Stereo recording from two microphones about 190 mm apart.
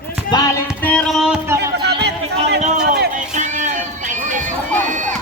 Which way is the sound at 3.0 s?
40° right (ahead or behind).